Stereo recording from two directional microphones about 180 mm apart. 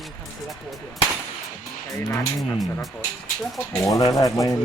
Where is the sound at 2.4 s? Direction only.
Centre (ahead or behind).